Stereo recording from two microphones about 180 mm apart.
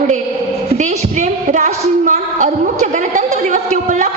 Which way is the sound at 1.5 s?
45° right (ahead or behind).